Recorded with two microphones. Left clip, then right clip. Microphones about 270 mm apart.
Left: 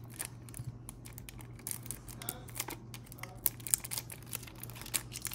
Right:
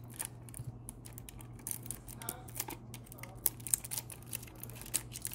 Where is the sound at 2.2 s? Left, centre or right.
Centre.